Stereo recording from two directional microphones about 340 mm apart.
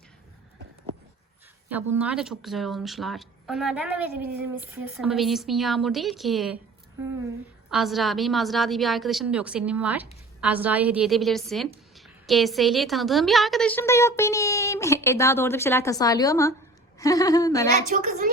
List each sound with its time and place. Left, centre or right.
1.7 s a woman's voice: centre
7.7 s a woman's voice: centre
17.8 s a woman's voice: right